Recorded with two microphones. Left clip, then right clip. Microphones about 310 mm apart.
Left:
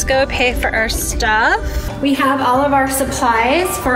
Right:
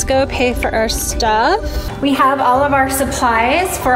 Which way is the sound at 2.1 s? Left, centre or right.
Right.